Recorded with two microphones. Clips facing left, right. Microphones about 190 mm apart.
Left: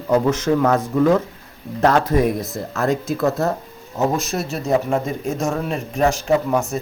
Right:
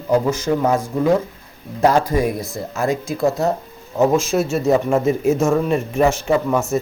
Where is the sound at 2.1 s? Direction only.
5° left (ahead or behind).